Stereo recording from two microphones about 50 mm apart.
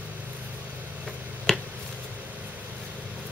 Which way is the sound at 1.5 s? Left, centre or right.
Centre.